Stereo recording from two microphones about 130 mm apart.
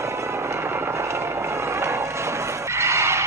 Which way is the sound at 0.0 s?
20° right (ahead or behind).